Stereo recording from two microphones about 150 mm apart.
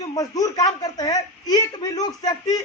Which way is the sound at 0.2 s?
25° left (ahead or behind).